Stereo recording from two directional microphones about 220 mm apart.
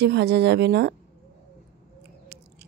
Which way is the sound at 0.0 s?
50° right (ahead or behind).